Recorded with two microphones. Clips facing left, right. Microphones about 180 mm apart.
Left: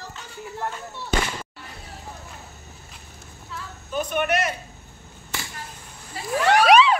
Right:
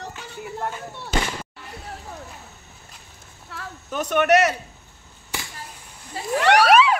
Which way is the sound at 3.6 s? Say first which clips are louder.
Even; 70° right (ahead or behind).